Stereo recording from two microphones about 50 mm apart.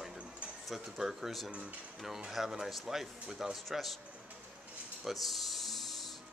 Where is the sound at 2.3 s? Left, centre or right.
Centre.